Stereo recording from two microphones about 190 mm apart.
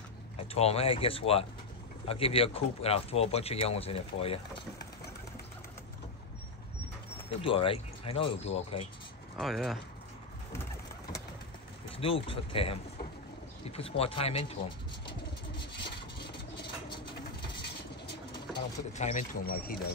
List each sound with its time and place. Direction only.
0.6 s speech: 30° left (ahead or behind)
7.2 s speech: 30° left (ahead or behind)
9.4 s speech: centre (ahead or behind)
10.5 s bird: 15° left (ahead or behind)
12.0 s speech: 30° left (ahead or behind)
15.0 s bird: 25° left (ahead or behind)
18.9 s speech: 40° left (ahead or behind)